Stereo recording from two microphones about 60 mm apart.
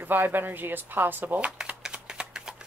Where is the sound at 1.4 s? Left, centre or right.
Right.